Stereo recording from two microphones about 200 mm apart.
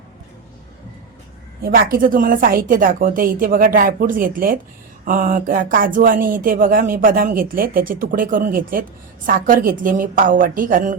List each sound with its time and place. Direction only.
1.6 s speech: 45° right (ahead or behind)